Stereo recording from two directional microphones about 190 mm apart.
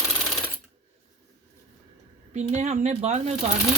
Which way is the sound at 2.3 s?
35° right (ahead or behind).